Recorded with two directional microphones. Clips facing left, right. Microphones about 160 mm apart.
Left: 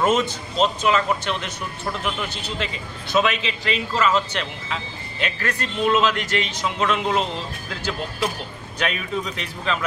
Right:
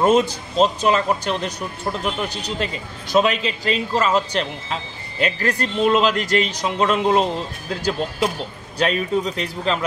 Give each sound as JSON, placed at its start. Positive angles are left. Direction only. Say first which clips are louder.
{"t": 0.0, "sound": "speech", "louder": "right 4 dB", "side_deg": -35}
{"t": 8.7, "sound": "speech", "louder": "right 6 dB", "side_deg": -35}